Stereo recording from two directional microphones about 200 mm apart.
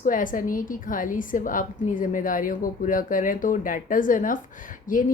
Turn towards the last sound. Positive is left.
turn(degrees=40)  # may be behind; listen again after turning